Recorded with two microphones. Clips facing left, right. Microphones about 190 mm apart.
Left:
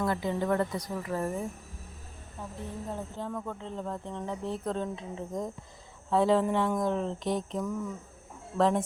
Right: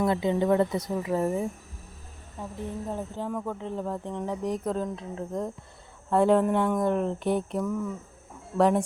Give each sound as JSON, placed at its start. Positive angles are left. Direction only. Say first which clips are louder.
{"t": 0.0, "sound": "a woman's voice", "louder": "right 5 dB", "side_deg": -20}
{"t": 2.9, "sound": "speech", "louder": "right 3 dB", "side_deg": -10}